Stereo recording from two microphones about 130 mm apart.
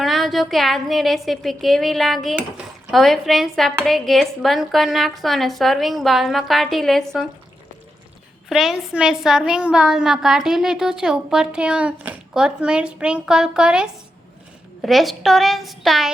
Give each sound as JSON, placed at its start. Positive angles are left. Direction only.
{"t": 0.0, "sound": "a woman's voice", "side_deg": 0}
{"t": 8.4, "sound": "a woman's voice", "side_deg": -5}